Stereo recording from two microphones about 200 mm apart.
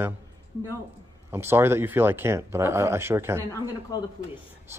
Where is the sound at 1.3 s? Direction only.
10° right (ahead or behind).